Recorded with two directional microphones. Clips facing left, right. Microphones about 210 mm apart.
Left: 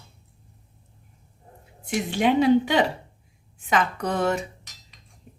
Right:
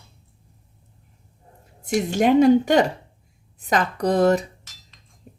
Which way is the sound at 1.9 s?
45° right (ahead or behind).